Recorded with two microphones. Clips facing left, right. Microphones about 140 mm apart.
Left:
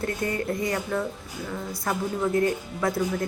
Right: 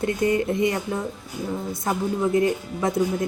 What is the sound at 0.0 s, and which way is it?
Speech, 20° right (ahead or behind).